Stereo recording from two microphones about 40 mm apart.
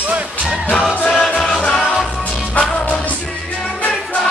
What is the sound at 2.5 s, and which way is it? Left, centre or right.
Music, left.